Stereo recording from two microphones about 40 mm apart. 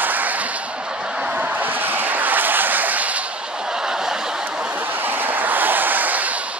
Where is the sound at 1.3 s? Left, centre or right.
Right.